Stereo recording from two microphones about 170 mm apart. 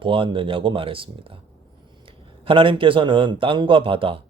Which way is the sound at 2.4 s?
30° right (ahead or behind).